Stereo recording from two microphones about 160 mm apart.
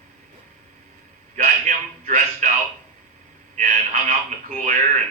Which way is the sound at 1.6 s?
50° right (ahead or behind).